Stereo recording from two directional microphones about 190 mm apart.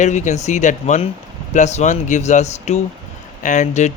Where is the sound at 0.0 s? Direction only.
40° left (ahead or behind).